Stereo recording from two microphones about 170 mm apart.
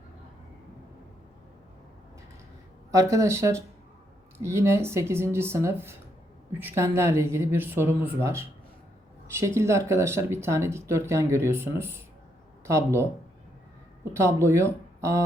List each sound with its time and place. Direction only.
2.9 s speech: 20° right (ahead or behind)